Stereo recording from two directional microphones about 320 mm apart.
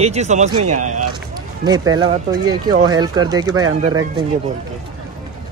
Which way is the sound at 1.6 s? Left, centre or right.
Centre.